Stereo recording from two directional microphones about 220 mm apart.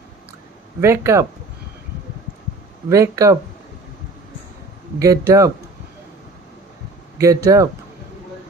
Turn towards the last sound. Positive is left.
turn(degrees=-15)  # may be behind; listen again after turning